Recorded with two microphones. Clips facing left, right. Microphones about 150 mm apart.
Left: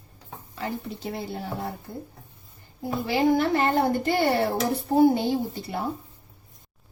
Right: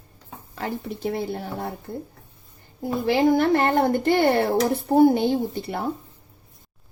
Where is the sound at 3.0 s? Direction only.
60° right (ahead or behind).